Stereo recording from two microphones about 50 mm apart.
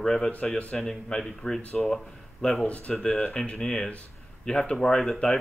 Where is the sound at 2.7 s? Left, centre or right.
Left.